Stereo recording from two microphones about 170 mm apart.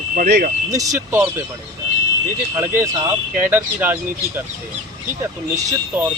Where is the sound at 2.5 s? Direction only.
15° right (ahead or behind).